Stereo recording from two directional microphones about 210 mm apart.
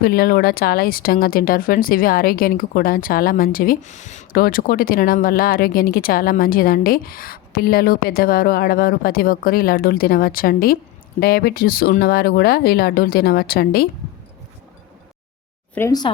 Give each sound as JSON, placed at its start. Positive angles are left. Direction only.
{"t": 0.0, "sound": "speech", "side_deg": 45}
{"t": 15.7, "sound": "speech", "side_deg": 15}